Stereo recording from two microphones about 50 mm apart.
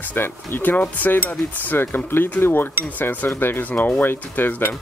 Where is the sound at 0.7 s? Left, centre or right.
Left.